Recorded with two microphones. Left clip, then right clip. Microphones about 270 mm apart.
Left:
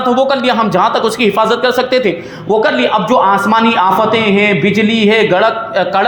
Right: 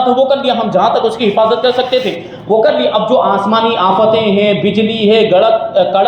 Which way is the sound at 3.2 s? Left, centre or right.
Left.